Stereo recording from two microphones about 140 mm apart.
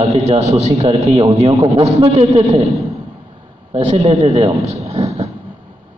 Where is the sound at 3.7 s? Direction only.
45° right (ahead or behind).